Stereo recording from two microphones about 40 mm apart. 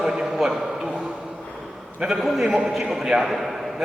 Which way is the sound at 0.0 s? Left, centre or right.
Centre.